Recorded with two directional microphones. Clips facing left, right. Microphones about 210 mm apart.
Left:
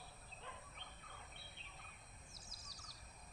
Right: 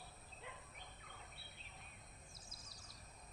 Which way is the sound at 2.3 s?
55° right (ahead or behind).